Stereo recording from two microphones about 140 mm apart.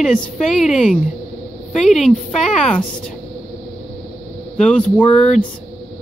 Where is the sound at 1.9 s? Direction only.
Centre (ahead or behind).